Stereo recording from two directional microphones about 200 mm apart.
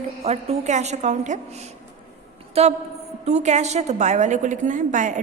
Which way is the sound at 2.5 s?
30° right (ahead or behind).